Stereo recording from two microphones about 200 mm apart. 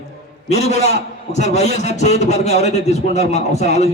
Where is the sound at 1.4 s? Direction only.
35° left (ahead or behind).